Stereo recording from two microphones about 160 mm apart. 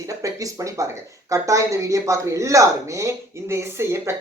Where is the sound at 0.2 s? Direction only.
20° right (ahead or behind).